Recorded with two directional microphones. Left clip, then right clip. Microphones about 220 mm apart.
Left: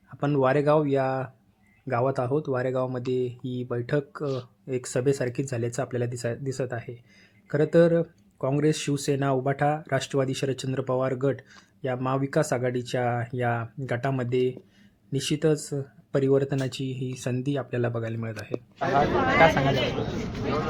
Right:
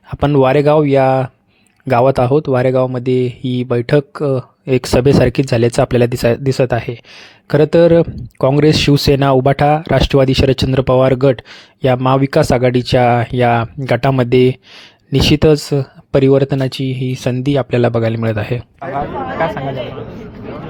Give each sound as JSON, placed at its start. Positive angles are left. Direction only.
{"t": 0.3, "sound": "speech", "side_deg": -35}